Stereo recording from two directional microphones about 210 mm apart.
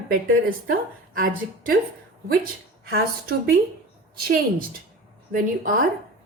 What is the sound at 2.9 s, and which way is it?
Speech, 50° right (ahead or behind).